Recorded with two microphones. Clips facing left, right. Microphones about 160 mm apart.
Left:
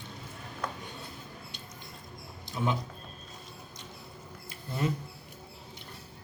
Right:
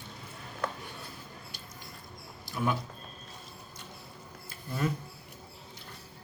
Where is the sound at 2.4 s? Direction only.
20° left (ahead or behind).